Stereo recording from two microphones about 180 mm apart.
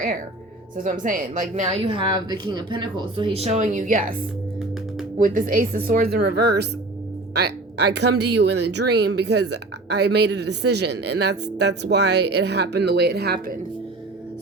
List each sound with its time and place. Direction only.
0.8 s a woman's voice: 45° right (ahead or behind)